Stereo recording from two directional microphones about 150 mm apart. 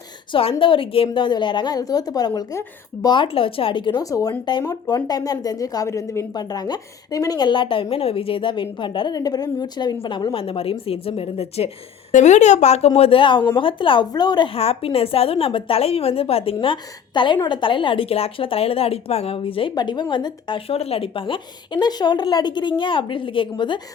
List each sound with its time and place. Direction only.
0.6 s a woman's voice: 35° left (ahead or behind)